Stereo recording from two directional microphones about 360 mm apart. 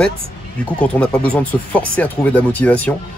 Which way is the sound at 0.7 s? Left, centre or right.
Centre.